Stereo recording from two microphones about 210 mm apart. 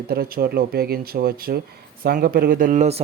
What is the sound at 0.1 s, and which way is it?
Speech, 45° right (ahead or behind).